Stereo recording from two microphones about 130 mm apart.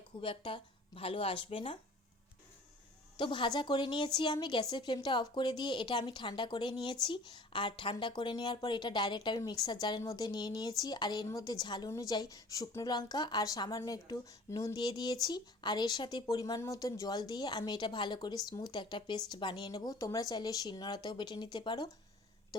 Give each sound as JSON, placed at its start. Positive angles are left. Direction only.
{"t": 0.2, "sound": "speech", "side_deg": 40}
{"t": 3.2, "sound": "a woman's voice", "side_deg": 40}